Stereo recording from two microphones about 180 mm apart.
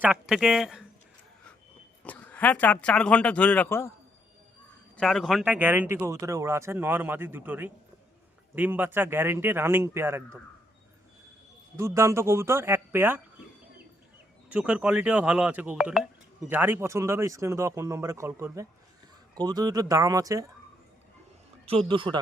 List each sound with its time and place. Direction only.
0.0 s speech: 5° right (ahead or behind)
2.0 s speech: 10° left (ahead or behind)
4.9 s speech: 5° left (ahead or behind); by 10.2 s 15° right (ahead or behind)
11.8 s speech: 15° right (ahead or behind)
14.5 s speech: 5° right (ahead or behind)
21.7 s speech: 30° right (ahead or behind)